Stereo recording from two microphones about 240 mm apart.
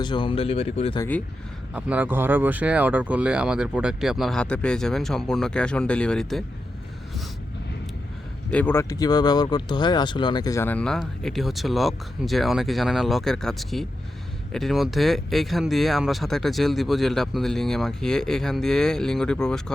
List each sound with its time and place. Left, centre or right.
0.0 s speech: centre
1.7 s speech: centre
8.4 s speech: centre